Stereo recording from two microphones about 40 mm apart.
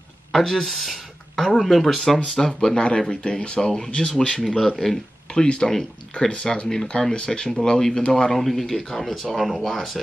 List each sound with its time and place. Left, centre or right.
0.3 s speech: centre
2.4 s speech: left
8.3 s speech: centre